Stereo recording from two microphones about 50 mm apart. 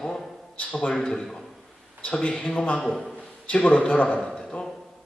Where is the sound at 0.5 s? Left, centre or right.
Left; by 1.6 s centre.